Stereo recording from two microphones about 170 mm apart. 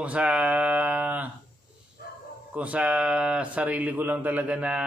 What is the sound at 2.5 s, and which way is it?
Speech, 10° right (ahead or behind).